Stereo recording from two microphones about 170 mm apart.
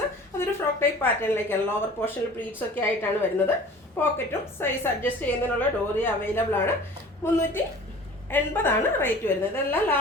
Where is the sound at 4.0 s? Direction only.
15° left (ahead or behind).